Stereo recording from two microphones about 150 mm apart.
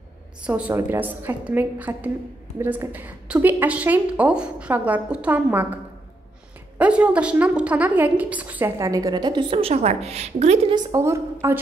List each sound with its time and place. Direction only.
0.4 s a woman's voice: 10° right (ahead or behind)
6.8 s a woman's voice: 10° right (ahead or behind); by 10.7 s 50° right (ahead or behind)
10.7 s a woman's voice: 25° right (ahead or behind)